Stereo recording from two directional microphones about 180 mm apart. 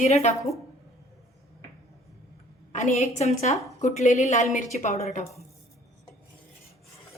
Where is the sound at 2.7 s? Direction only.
40° left (ahead or behind).